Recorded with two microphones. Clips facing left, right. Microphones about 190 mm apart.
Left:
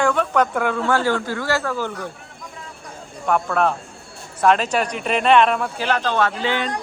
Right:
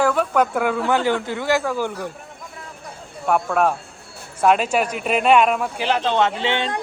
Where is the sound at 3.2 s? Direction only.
5° right (ahead or behind); by 6.7 s 25° right (ahead or behind).